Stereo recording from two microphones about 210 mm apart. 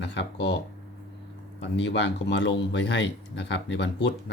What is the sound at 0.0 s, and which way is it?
Speech, 55° left (ahead or behind).